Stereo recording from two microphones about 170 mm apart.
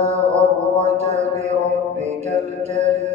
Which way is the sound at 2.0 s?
40° right (ahead or behind).